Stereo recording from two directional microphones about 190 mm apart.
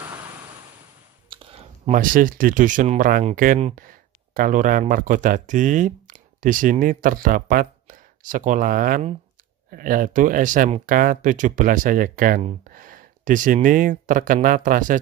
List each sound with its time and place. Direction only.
0.0 s vehicle: 20° right (ahead or behind)
1.3 s a sound: 25° right (ahead or behind)
1.9 s speech: 45° right (ahead or behind)